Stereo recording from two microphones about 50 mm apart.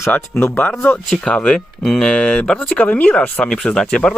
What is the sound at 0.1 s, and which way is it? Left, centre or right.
Speech, left.